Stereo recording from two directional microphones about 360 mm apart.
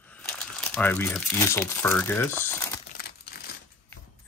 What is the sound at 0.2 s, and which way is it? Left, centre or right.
Speech, centre.